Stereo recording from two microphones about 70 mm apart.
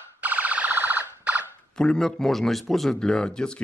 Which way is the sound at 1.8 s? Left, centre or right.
Centre.